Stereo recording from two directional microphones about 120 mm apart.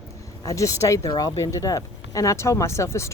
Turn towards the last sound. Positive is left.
turn(degrees=25)  # may be behind; listen again after turning